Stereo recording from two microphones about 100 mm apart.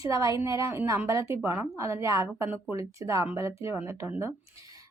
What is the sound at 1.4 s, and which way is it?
Speech, 15° right (ahead or behind).